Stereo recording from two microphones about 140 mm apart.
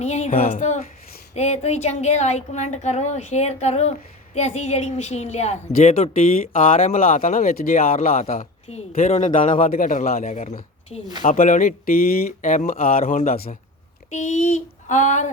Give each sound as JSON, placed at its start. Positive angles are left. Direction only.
{"t": 0.0, "sound": "speech", "side_deg": 55}
{"t": 0.3, "sound": "a sound", "side_deg": 60}
{"t": 1.4, "sound": "speech", "side_deg": 50}
{"t": 6.7, "sound": "speech", "side_deg": 60}
{"t": 9.0, "sound": "speech", "side_deg": 45}
{"t": 9.4, "sound": "a man's voice", "side_deg": 75}
{"t": 10.2, "sound": "speech", "side_deg": 50}
{"t": 11.2, "sound": "speech", "side_deg": 85}
{"t": 14.1, "sound": "a sound", "side_deg": 55}